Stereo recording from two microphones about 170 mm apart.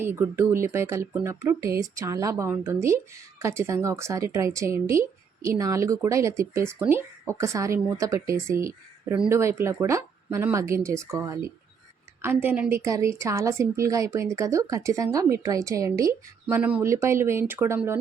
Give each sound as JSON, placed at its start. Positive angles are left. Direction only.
{"t": 0.0, "sound": "speech", "side_deg": -15}